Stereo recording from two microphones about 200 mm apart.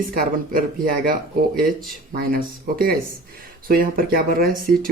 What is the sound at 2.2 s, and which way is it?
Speech, 45° right (ahead or behind).